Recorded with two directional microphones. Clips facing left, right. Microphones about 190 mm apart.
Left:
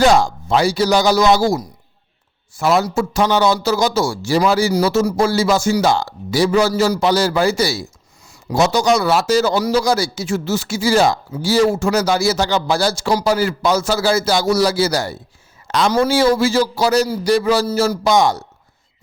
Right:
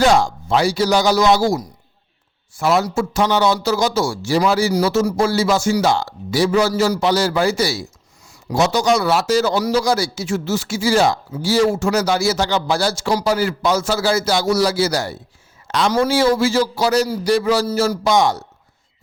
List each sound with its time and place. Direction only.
0.0 s speech: 40° left (ahead or behind)
2.6 s speech: 45° left (ahead or behind)
15.6 s a sound: 40° left (ahead or behind)
15.9 s speech: 35° left (ahead or behind)